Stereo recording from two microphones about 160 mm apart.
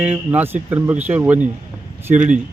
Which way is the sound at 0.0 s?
10° right (ahead or behind).